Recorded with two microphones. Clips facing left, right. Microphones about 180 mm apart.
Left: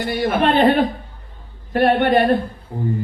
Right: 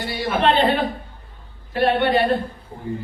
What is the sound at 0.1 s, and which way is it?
A man's voice, 50° left (ahead or behind).